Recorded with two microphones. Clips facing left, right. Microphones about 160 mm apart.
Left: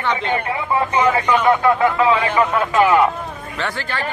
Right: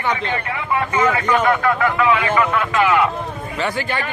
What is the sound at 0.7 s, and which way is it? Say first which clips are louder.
A man's voice: left 1 dB; 20° left (ahead or behind).